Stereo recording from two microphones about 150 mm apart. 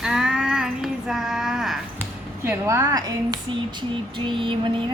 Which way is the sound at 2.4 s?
20° right (ahead or behind).